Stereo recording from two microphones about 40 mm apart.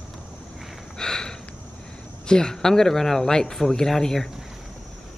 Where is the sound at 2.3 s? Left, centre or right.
Centre.